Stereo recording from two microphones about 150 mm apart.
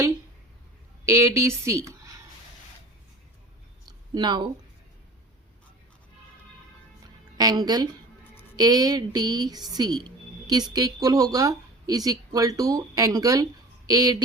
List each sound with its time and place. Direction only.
1.0 s speech: 20° right (ahead or behind)
3.8 s a sound: 30° right (ahead or behind)
7.3 s speech: 25° right (ahead or behind)